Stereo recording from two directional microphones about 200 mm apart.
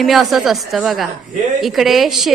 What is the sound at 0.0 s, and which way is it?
A woman's voice, centre (ahead or behind).